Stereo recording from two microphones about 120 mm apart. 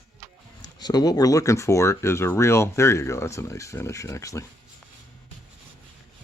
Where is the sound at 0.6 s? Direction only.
35° left (ahead or behind).